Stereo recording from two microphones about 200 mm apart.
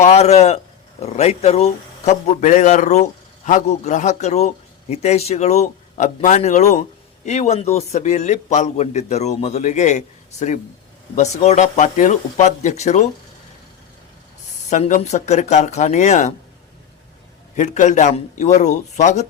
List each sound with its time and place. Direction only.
0.0 s speech: 35° left (ahead or behind)
11.1 s speech: 35° left (ahead or behind)
14.7 s speech: 35° left (ahead or behind)
17.5 s speech: 40° left (ahead or behind)